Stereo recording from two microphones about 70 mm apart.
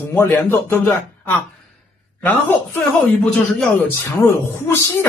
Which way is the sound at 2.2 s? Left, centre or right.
Left.